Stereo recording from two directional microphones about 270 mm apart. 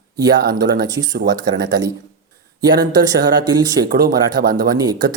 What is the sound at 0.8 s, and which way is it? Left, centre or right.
Speech, centre.